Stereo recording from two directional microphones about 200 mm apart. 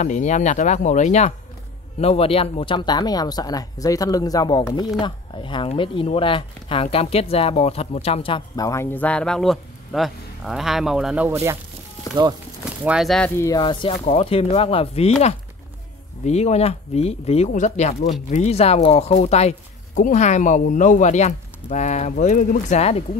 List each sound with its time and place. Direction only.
0.0 s speech: 35° left (ahead or behind); by 11.5 s 10° right (ahead or behind)
12.6 s speech: 5° right (ahead or behind)
13.4 s speech: 20° left (ahead or behind)
13.9 s speech: 35° left (ahead or behind)